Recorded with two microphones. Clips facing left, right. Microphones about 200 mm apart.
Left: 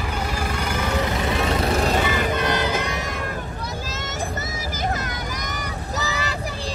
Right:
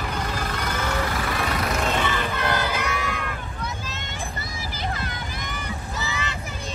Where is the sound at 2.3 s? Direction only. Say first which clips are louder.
Left 3 dB; 20° left (ahead or behind).